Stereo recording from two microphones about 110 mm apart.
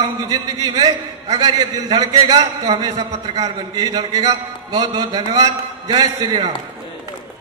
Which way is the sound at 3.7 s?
35° right (ahead or behind).